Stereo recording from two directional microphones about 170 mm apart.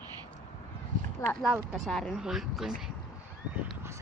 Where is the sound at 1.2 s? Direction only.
15° left (ahead or behind).